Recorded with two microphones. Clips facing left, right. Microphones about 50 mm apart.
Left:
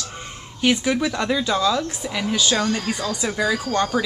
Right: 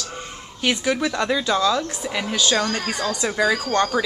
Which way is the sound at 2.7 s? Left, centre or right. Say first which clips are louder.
Even; right.